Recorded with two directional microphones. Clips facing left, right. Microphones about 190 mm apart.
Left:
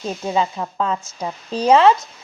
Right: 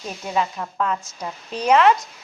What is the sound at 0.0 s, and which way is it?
Speech, 30° left (ahead or behind).